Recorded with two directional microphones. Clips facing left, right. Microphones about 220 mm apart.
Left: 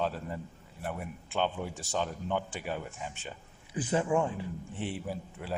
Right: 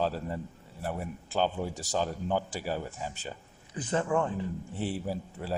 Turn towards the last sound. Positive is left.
turn(degrees=-35)  # may be behind; listen again after turning